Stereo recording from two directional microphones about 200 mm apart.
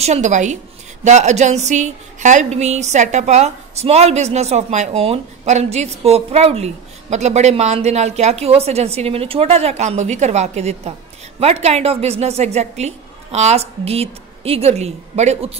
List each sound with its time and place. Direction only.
0.0 s a woman's voice: 35° right (ahead or behind)